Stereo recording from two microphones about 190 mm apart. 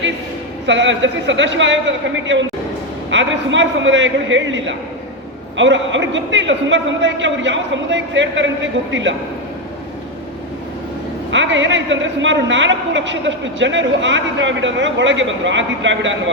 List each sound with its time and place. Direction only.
0.7 s a woman's voice: 75° right (ahead or behind)
11.3 s a woman's voice: 75° right (ahead or behind)